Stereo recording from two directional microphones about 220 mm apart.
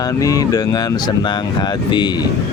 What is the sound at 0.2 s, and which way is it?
Speech, 15° left (ahead or behind).